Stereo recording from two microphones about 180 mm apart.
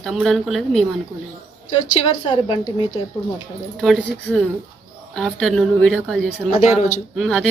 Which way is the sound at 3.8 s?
Centre (ahead or behind).